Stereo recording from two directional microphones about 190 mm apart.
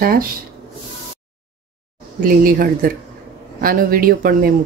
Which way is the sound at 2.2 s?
45° right (ahead or behind).